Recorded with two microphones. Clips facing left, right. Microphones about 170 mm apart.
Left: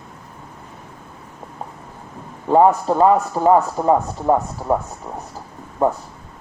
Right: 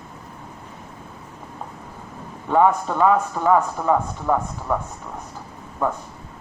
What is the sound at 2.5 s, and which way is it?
Speech, 35° left (ahead or behind).